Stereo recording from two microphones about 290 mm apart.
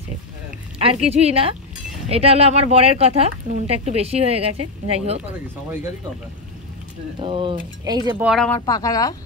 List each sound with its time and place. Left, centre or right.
0.7 s speech: centre
7.2 s speech: centre
8.1 s speech: centre
8.5 s a woman's voice: centre